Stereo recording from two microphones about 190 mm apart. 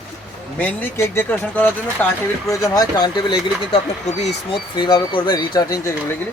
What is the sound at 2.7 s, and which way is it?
Speech, 25° left (ahead or behind).